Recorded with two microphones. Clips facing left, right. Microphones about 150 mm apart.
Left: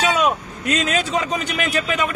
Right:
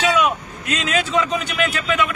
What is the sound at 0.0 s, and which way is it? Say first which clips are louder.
A man's voice: even; 35° left (ahead or behind).